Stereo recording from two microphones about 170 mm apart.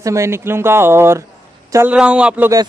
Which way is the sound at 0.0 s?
15° right (ahead or behind).